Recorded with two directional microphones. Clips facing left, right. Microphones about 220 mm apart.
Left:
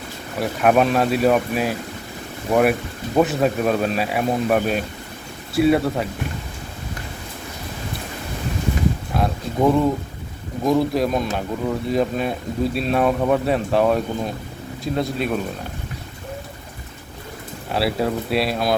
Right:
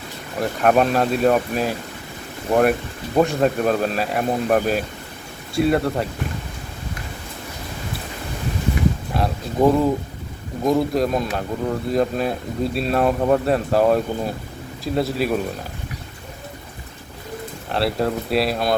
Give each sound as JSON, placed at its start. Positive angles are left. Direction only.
{"t": 0.3, "sound": "speech", "side_deg": 5}
{"t": 9.1, "sound": "speech", "side_deg": 0}
{"t": 17.7, "sound": "speech", "side_deg": 5}